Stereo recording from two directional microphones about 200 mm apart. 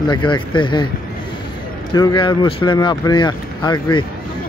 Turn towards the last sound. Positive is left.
turn(degrees=20)  # may be behind; listen again after turning